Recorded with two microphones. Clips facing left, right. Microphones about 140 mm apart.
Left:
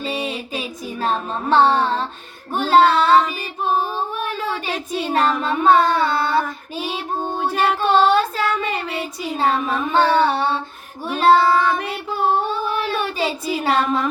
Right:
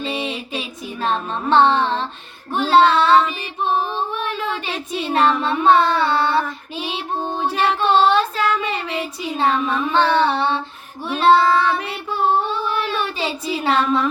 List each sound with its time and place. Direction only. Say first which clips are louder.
0.0 s child singing: even; 40° left (ahead or behind)
2.5 s female singing: even; 45° left (ahead or behind)
11.1 s child singing: even; 45° left (ahead or behind)
12.6 s female singing: even; 45° left (ahead or behind)